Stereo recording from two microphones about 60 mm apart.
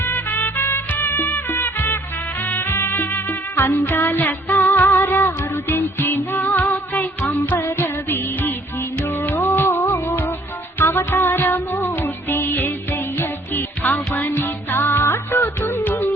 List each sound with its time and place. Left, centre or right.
0.0 s music: left